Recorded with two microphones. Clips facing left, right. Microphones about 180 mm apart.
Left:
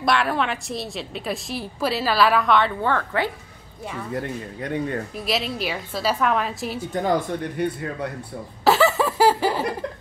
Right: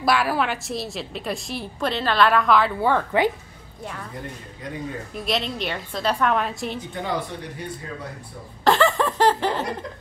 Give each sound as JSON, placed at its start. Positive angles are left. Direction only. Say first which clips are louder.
{"t": 0.0, "sound": "a woman's voice", "louder": "even", "side_deg": -5}
{"t": 2.9, "sound": "a woman's voice", "louder": "right 3 dB", "side_deg": -15}
{"t": 4.1, "sound": "speech", "louder": "left 8 dB", "side_deg": 70}
{"t": 5.1, "sound": "a woman's voice", "louder": "even", "side_deg": 5}
{"t": 6.9, "sound": "speech", "louder": "left 9 dB", "side_deg": 45}
{"t": 7.6, "sound": "speech", "louder": "left 11 dB", "side_deg": 60}
{"t": 8.6, "sound": "a sound", "louder": "left 1 dB", "side_deg": 5}